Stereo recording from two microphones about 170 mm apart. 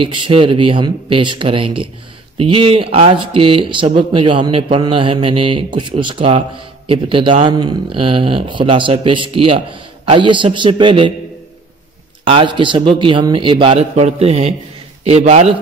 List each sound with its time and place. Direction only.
0.0 s speech: 30° right (ahead or behind)
12.3 s speech: 30° right (ahead or behind)